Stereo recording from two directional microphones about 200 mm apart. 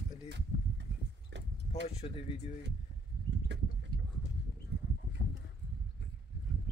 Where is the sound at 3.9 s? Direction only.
55° left (ahead or behind).